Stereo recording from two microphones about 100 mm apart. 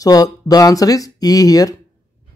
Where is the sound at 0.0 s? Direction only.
40° left (ahead or behind).